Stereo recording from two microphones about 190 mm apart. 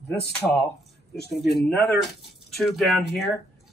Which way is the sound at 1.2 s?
60° left (ahead or behind).